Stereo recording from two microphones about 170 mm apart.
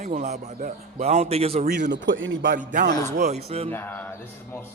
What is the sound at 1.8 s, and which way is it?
Speech, 85° right.